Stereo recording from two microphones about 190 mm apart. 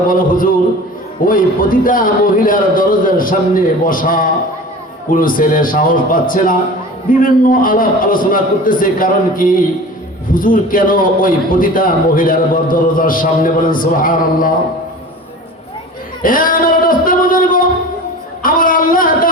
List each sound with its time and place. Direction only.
0.1 s a man's voice: 45° left (ahead or behind)
16.2 s speech: 45° left (ahead or behind)
18.4 s a sound: 45° left (ahead or behind)